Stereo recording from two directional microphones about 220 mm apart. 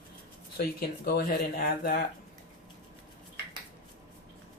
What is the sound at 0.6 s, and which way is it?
Speech, 40° left (ahead or behind).